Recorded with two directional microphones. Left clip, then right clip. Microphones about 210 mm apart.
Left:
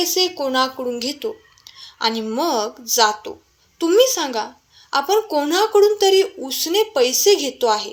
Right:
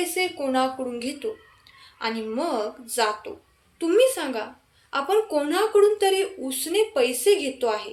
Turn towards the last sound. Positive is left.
turn(degrees=30)  # may be behind; listen again after turning